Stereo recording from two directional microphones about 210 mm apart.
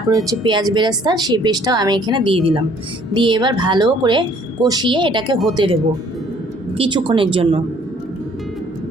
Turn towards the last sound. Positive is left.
turn(degrees=-25)  # may be behind; listen again after turning